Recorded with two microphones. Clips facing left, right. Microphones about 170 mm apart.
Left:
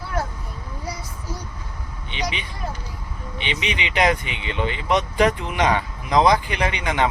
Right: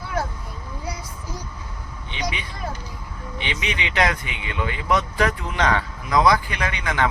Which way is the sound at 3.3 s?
20° left (ahead or behind).